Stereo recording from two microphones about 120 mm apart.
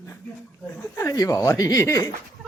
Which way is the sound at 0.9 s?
25° left (ahead or behind).